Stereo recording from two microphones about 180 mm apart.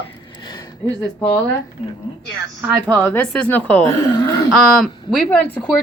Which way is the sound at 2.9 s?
10° left (ahead or behind).